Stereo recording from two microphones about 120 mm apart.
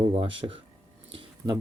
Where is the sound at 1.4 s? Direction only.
25° right (ahead or behind).